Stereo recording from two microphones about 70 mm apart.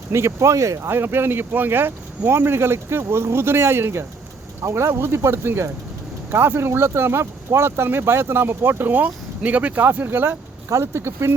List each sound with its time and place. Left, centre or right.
0.1 s speech: right
10.7 s speech: right